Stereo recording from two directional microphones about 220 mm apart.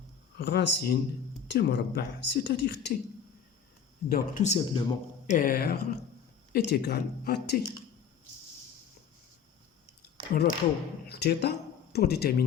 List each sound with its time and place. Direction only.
0.3 s speech: 50° left (ahead or behind)
4.1 s speech: 35° left (ahead or behind)
5.2 s speech: 35° left (ahead or behind)
10.0 s a sound: 45° left (ahead or behind)
11.1 s speech: 50° left (ahead or behind)